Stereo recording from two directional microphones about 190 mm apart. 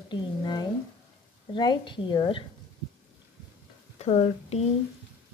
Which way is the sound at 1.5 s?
25° left (ahead or behind).